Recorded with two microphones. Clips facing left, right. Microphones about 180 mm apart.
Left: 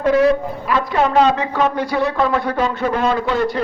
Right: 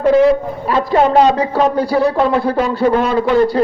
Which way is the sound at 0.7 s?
35° right (ahead or behind).